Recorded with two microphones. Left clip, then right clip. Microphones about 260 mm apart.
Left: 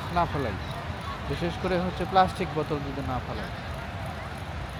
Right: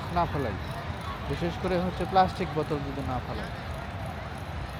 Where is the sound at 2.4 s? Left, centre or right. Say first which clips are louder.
Left 1 dB; left.